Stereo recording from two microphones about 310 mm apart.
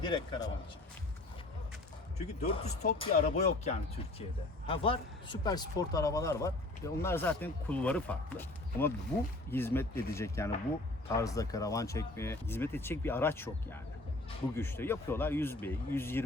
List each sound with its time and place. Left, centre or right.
0.0 s speech: centre
2.4 s speech: left